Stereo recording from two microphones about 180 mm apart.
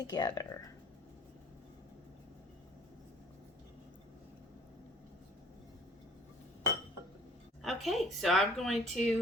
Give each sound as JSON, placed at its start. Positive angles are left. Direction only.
{"t": 0.0, "sound": "speech", "side_deg": 20}
{"t": 7.6, "sound": "speech", "side_deg": 0}